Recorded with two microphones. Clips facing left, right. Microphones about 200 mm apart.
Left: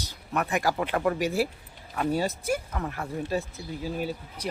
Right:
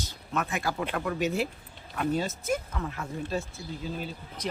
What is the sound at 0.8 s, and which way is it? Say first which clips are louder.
Speech: left 5 dB; 55° left (ahead or behind).